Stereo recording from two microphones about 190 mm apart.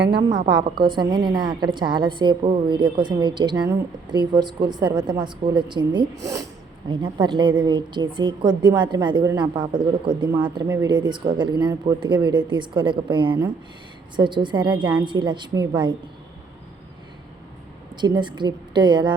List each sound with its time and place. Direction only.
0.4 s a woman's voice: 25° right (ahead or behind)
18.0 s a woman's voice: 25° right (ahead or behind)